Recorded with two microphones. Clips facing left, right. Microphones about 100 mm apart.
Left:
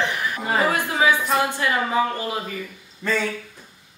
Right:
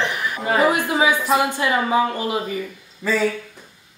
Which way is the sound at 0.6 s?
20° right (ahead or behind).